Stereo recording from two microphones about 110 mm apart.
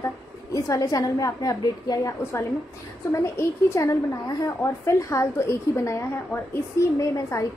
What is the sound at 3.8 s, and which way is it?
A woman's voice, 30° left (ahead or behind).